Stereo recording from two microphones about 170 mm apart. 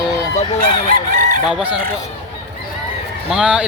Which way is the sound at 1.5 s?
10° right (ahead or behind).